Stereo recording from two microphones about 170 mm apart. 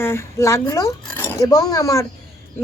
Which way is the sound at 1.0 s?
10° left (ahead or behind).